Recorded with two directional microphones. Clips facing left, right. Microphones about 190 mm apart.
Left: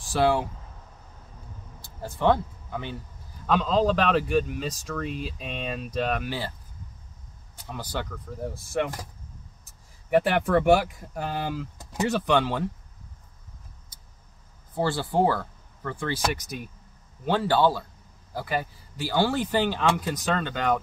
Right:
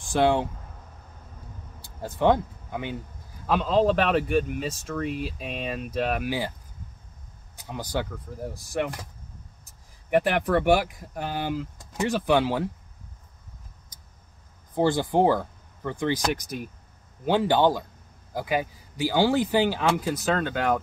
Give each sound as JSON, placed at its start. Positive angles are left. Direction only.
{"t": 0.2, "sound": "speech", "side_deg": -20}
{"t": 2.1, "sound": "speech", "side_deg": -15}
{"t": 3.4, "sound": "speech", "side_deg": -5}
{"t": 7.5, "sound": "speech", "side_deg": -10}
{"t": 10.2, "sound": "speech", "side_deg": 0}
{"t": 14.8, "sound": "speech", "side_deg": -15}